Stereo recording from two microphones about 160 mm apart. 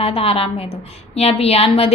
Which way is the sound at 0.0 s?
35° left (ahead or behind).